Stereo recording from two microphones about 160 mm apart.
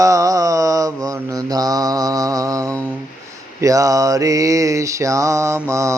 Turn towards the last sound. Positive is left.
turn(degrees=-20)  # may be behind; listen again after turning